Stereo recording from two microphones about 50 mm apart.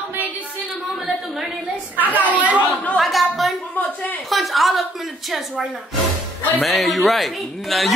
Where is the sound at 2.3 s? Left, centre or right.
Right.